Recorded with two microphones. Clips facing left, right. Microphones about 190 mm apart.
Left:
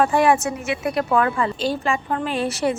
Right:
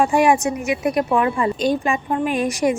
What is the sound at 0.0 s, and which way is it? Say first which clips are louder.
A woman's voice: right 1 dB; 15° right (ahead or behind).